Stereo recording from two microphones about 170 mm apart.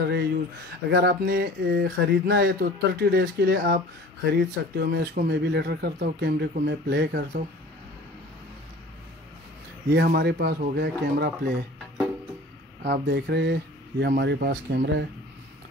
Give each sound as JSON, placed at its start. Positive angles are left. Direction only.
{"t": 0.0, "sound": "speech", "side_deg": -75}
{"t": 9.9, "sound": "speech", "side_deg": -75}
{"t": 12.8, "sound": "speech", "side_deg": -75}